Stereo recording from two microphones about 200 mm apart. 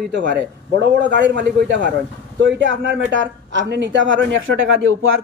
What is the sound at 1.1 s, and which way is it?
Speech, 60° right (ahead or behind).